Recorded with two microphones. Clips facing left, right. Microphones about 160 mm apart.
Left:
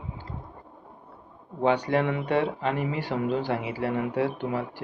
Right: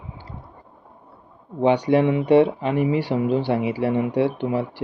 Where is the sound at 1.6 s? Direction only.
15° right (ahead or behind).